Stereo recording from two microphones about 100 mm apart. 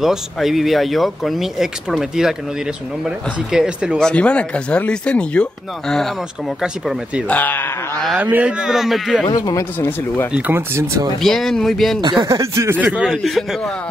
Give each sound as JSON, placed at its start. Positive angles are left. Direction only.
{"t": 0.0, "sound": "speech", "side_deg": -5}
{"t": 4.0, "sound": "speech", "side_deg": 10}
{"t": 6.6, "sound": "a man's voice", "side_deg": -10}
{"t": 7.2, "sound": "speech", "side_deg": 15}
{"t": 8.2, "sound": "a man's voice", "side_deg": -15}
{"t": 9.4, "sound": "speech", "side_deg": 35}
{"t": 9.8, "sound": "speech", "side_deg": 20}
{"t": 10.5, "sound": "speech", "side_deg": -25}
{"t": 11.1, "sound": "speech", "side_deg": 5}
{"t": 12.0, "sound": "speech", "side_deg": -50}
{"t": 12.3, "sound": "speech", "side_deg": -30}
{"t": 12.7, "sound": "speech", "side_deg": -10}